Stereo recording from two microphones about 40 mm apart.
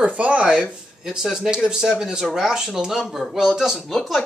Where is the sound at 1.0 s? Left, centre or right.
Centre.